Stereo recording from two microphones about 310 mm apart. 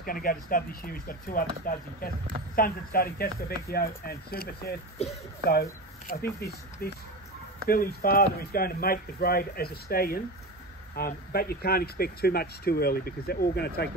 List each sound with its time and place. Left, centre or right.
0.0 s speech: left
2.5 s speech: left